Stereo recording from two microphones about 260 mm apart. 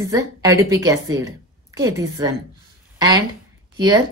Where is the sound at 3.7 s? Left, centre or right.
Centre.